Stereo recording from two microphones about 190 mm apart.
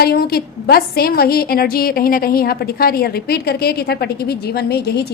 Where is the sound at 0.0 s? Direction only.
55° left (ahead or behind).